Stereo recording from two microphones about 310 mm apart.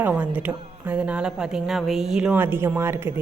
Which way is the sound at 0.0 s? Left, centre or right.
Centre.